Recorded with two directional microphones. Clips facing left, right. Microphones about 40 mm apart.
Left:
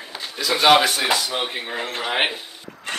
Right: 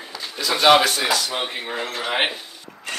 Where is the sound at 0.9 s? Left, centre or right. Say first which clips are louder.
Even; left.